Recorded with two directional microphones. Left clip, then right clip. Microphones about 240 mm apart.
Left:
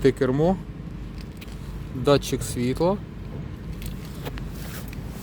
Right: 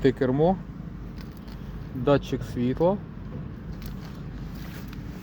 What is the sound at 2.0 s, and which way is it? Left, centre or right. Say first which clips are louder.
Speech: left 3 dB; centre.